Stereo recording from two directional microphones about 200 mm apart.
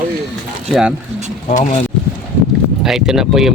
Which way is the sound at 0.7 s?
Centre (ahead or behind).